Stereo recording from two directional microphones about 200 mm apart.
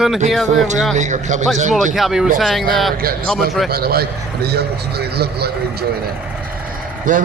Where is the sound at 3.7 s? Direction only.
50° right (ahead or behind).